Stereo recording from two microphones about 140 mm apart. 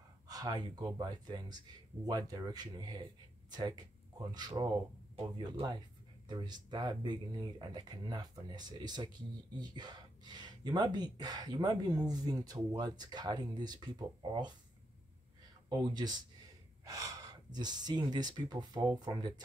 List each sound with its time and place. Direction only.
0.3 s speech: 30° right (ahead or behind)
15.7 s speech: 30° right (ahead or behind)